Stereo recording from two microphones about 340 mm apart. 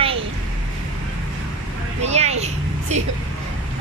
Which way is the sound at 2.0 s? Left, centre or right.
Centre.